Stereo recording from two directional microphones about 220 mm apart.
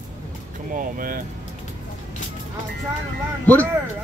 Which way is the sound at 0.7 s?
40° right (ahead or behind).